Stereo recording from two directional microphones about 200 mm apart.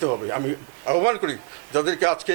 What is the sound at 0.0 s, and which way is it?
A man's voice, 25° right (ahead or behind).